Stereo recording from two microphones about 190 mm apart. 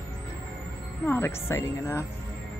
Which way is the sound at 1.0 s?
10° left (ahead or behind).